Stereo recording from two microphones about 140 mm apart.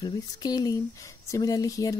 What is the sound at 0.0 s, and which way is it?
Speech, 30° left (ahead or behind).